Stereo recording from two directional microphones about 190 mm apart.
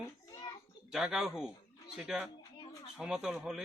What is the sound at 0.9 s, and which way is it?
A man's voice, centre (ahead or behind).